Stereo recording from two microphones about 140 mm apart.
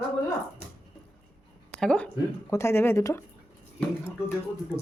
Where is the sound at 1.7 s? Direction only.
5° left (ahead or behind).